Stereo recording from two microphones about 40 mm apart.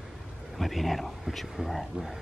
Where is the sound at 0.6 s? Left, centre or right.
Centre.